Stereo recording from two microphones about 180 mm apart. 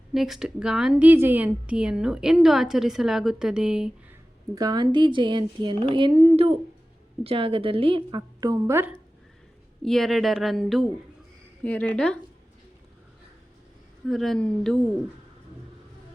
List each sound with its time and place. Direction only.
0.1 s a woman's voice: centre (ahead or behind)
4.5 s speech: 20° right (ahead or behind)
9.8 s a woman's voice: centre (ahead or behind)
14.1 s a woman's voice: centre (ahead or behind)